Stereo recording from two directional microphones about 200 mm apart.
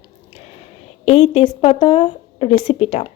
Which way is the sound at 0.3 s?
30° left (ahead or behind).